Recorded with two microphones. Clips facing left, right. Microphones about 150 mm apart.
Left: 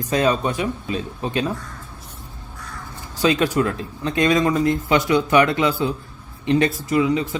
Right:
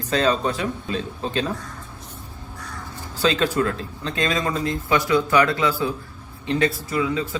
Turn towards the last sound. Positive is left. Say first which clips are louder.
# left 5 dB
turn(degrees=20)  # may be behind; listen again after turning